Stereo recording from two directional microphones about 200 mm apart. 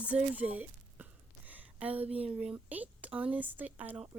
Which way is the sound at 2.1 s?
5° right (ahead or behind).